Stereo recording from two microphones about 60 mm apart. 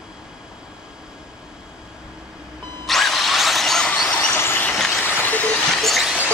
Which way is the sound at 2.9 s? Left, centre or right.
Centre.